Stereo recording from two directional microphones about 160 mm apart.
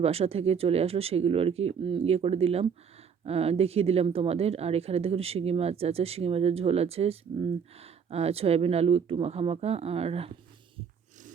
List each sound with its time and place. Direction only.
0.0 s speech: 40° right (ahead or behind)